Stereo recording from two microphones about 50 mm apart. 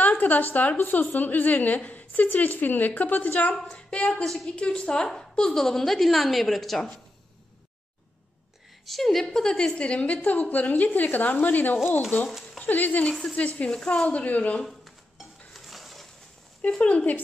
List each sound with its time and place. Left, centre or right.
0.0 s a woman's voice: left
4.1 s a woman's voice: centre
4.6 s a woman's voice: left; by 6.8 s centre
8.8 s a woman's voice: centre; by 13.1 s left
13.6 s a woman's voice: left
14.7 s dishes: centre
16.6 s a woman's voice: left